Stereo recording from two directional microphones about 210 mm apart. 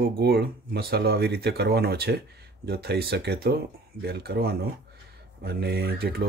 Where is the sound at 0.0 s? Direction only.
50° right (ahead or behind).